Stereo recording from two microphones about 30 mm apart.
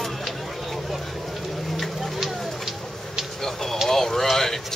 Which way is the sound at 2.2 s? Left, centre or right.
Centre.